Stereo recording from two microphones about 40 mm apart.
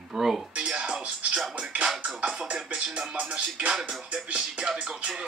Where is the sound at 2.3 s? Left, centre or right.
Centre.